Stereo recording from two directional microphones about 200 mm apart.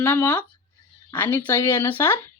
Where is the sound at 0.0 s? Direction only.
10° left (ahead or behind).